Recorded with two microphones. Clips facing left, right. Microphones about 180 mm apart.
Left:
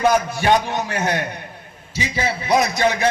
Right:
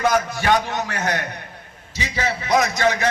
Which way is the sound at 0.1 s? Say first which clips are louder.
Left 2 dB; 15° left (ahead or behind).